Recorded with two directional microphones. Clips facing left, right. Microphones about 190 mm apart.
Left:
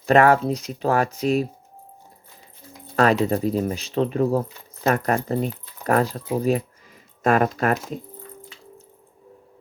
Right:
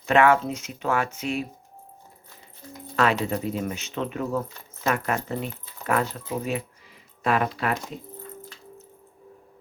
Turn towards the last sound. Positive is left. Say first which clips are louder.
# left 5 dB
turn(degrees=45)  # may be behind; listen again after turning